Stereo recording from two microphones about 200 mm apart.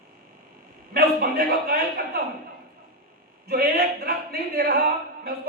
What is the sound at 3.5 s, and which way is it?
A man's voice, 50° right (ahead or behind).